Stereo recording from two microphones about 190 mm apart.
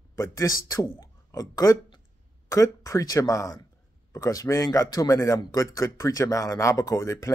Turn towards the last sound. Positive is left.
turn(degrees=15)  # may be behind; listen again after turning